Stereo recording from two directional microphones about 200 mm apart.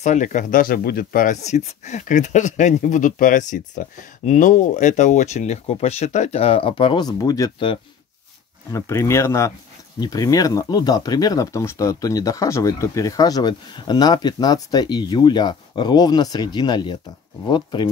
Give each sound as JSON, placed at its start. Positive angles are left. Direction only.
{"t": 0.0, "sound": "speech", "side_deg": 35}
{"t": 8.7, "sound": "speech", "side_deg": 15}